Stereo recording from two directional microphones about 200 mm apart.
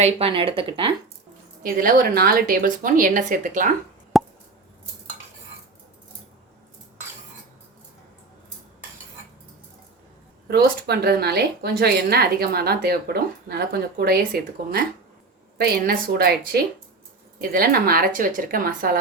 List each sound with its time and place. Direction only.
0.0 s speech: 30° right (ahead or behind)
1.6 s a woman's voice: 45° right (ahead or behind)
4.1 s plop: centre (ahead or behind)
10.5 s a woman's voice: 50° right (ahead or behind)
15.5 s a woman's voice: 50° right (ahead or behind)